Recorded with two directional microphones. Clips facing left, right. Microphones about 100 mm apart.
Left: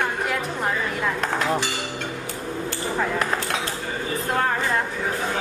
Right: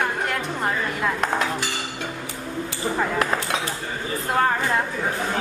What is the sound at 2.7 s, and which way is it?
Speech, 5° right (ahead or behind).